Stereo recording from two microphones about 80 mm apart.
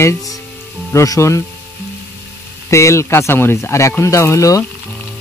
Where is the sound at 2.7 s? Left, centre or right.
Left.